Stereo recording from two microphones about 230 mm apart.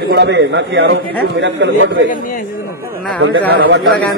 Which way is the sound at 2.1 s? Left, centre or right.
Left.